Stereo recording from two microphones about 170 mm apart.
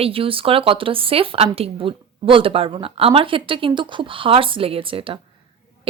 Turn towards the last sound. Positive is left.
turn(degrees=-30)  # may be behind; listen again after turning